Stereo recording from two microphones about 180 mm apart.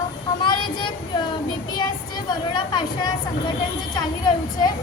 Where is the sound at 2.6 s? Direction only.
25° left (ahead or behind).